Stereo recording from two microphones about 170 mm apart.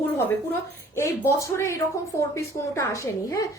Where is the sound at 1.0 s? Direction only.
15° left (ahead or behind).